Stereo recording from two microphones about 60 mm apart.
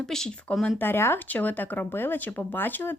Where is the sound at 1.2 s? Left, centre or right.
Left.